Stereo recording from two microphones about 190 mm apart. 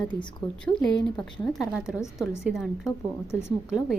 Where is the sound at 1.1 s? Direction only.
5° left (ahead or behind).